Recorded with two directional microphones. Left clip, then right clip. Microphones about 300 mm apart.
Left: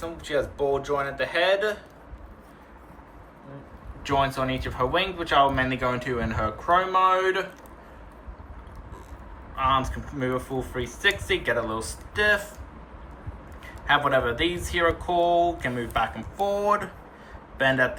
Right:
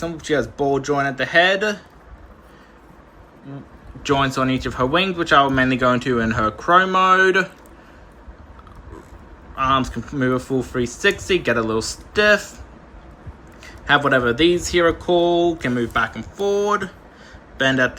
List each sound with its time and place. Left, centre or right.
0.0 s speech: centre
4.0 s speech: centre
9.6 s speech: centre
13.8 s speech: centre